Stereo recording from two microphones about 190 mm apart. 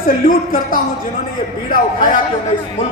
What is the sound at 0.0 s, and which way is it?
Speech, 45° left (ahead or behind).